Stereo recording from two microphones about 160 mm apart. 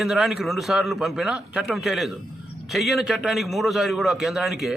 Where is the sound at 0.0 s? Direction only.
Centre (ahead or behind).